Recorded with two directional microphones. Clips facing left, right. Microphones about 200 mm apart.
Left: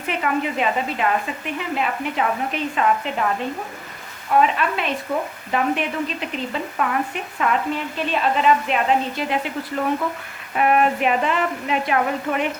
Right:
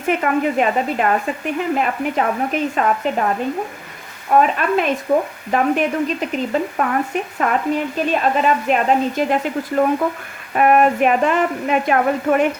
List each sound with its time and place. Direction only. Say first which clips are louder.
0.2 s a woman's voice: right 5 dB; 45° right (ahead or behind)
4.4 s a woman's voice: right 3 dB; 45° right (ahead or behind)